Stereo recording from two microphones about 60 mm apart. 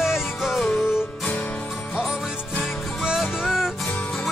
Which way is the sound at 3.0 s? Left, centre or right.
Centre.